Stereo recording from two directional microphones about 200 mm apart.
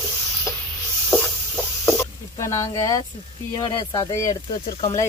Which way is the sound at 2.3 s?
15° left (ahead or behind).